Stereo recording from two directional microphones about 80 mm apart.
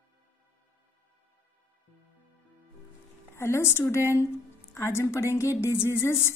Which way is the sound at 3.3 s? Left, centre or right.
Left.